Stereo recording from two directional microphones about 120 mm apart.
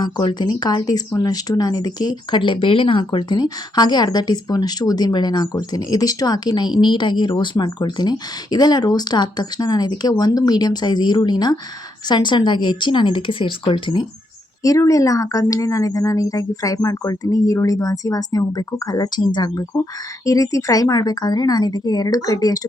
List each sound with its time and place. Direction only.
0.0 s speech: 40° left (ahead or behind)
14.6 s speech: 30° left (ahead or behind)